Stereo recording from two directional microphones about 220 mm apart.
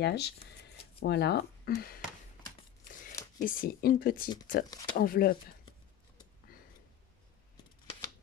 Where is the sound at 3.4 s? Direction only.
40° left (ahead or behind).